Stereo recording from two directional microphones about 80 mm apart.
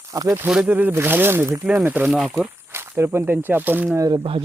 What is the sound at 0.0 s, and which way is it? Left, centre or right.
Speech, right.